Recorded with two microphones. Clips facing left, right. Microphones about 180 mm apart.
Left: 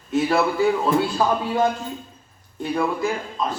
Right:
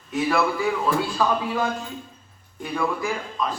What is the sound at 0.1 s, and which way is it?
A man's voice, 30° left (ahead or behind).